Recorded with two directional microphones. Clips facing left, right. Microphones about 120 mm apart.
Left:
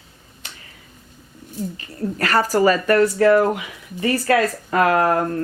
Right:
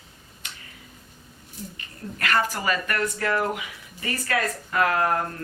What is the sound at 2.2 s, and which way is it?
Speech, 35° left (ahead or behind).